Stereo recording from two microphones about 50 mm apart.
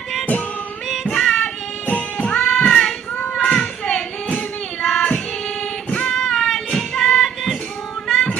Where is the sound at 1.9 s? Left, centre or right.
Left.